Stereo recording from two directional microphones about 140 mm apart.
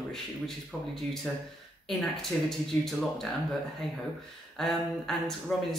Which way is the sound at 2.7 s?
15° left (ahead or behind).